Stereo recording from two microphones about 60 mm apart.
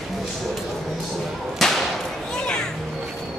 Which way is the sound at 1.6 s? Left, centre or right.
Centre.